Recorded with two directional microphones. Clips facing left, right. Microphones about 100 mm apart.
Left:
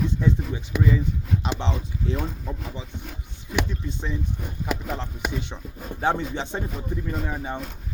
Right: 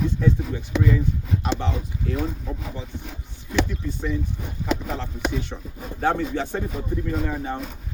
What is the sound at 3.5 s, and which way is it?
Speech, 20° left (ahead or behind).